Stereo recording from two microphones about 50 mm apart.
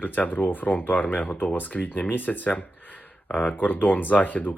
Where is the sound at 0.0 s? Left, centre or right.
Left.